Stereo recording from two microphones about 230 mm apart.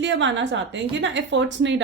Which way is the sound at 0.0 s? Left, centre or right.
Right.